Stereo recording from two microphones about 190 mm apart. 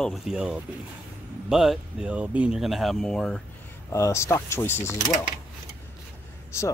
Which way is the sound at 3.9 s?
15° left (ahead or behind).